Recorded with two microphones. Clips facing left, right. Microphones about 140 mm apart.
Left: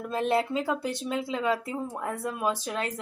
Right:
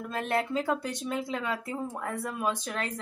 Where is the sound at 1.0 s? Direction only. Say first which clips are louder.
Left 7 dB; 20° left (ahead or behind).